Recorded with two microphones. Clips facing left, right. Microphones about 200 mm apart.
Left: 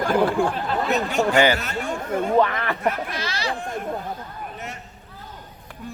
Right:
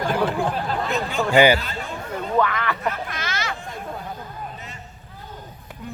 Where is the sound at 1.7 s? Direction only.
50° left (ahead or behind).